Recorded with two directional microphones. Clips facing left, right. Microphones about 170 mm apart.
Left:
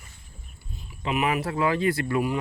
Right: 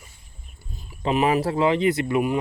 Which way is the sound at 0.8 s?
35° right (ahead or behind).